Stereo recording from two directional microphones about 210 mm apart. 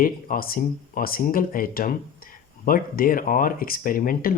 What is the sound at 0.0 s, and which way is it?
Speech, 45° left (ahead or behind).